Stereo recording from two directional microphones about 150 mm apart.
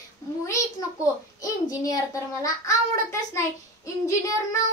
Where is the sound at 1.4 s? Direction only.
20° left (ahead or behind).